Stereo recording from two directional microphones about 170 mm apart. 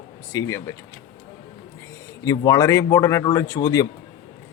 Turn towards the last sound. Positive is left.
turn(degrees=20)  # may be behind; listen again after turning